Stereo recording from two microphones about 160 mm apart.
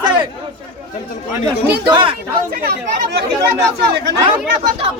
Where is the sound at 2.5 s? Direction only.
80° right.